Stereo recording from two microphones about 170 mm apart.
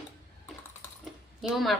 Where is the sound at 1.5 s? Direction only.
Centre (ahead or behind).